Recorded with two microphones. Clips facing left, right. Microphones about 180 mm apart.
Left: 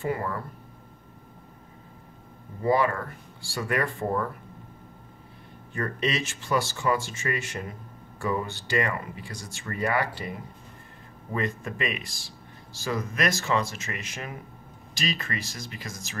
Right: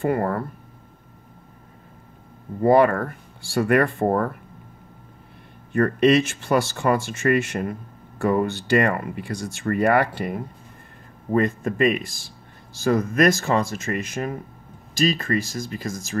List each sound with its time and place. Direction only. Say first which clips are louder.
0.0 s speech: right 7 dB; 55° right (ahead or behind)
2.6 s speech: right 8 dB; 55° right (ahead or behind)
5.7 s speech: right 12 dB; 60° right (ahead or behind)